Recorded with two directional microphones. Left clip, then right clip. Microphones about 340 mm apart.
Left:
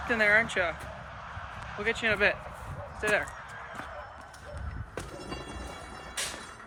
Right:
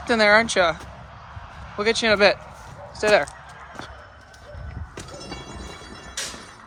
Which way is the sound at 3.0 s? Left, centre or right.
Centre.